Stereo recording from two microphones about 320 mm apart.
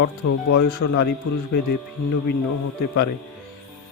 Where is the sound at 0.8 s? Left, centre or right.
Left.